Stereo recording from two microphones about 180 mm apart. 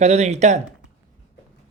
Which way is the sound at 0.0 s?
40° right (ahead or behind).